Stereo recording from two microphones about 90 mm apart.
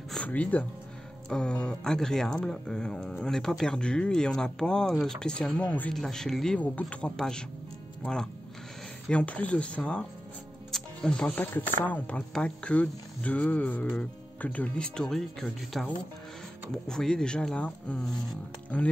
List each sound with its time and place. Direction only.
0.3 s speech: 15° left (ahead or behind)
10.7 s music: 10° left (ahead or behind)
11.5 s speech: 20° left (ahead or behind)